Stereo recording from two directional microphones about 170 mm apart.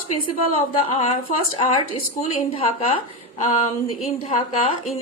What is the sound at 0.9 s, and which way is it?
Speech, 35° left (ahead or behind).